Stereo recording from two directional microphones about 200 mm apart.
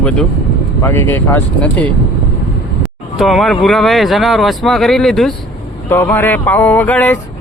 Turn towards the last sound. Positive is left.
turn(degrees=10)  # may be behind; listen again after turning